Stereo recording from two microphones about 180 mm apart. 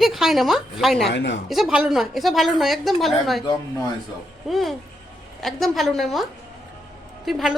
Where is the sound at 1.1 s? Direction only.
85° left.